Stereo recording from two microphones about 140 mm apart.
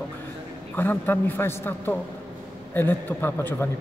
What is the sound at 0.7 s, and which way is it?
A man's voice, 15° left (ahead or behind).